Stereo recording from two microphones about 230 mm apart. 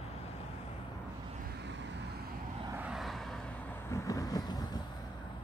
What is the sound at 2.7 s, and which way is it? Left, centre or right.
Vehicle, centre.